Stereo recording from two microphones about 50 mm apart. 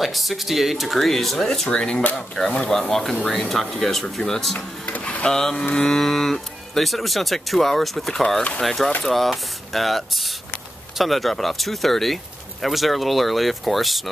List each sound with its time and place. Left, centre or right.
0.0 s speech: centre
1.7 s speech: centre
2.1 s speech: centre
4.6 s drawer open or close: left
5.2 s speech: centre